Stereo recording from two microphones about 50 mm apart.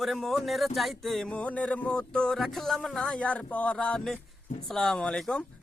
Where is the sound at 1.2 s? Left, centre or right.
Left.